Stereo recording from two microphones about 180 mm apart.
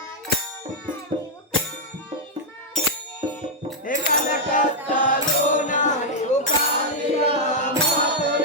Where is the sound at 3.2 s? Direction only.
30° right (ahead or behind).